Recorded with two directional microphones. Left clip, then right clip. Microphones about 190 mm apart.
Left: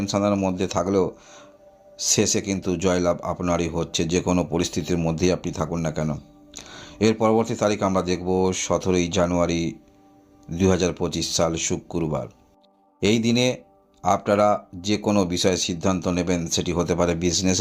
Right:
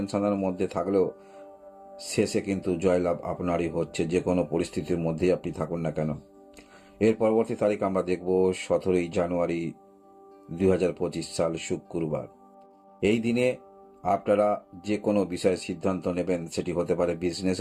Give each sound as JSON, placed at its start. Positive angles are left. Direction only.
{"t": 0.0, "sound": "speech", "side_deg": 35}